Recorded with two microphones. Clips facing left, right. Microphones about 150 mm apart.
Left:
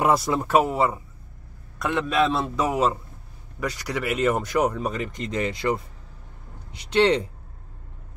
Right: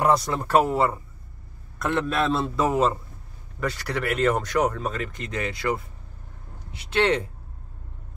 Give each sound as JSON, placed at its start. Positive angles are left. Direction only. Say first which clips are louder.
{"t": 0.0, "sound": "a man's voice", "louder": "left 1 dB", "side_deg": 10}
{"t": 6.9, "sound": "speech", "louder": "left 3 dB", "side_deg": 20}